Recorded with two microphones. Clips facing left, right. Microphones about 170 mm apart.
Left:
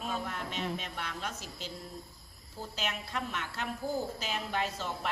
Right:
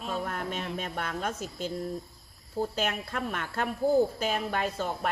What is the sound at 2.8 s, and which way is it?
A woman's voice, 50° right (ahead or behind).